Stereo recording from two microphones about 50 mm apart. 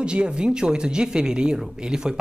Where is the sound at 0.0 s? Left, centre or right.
Centre.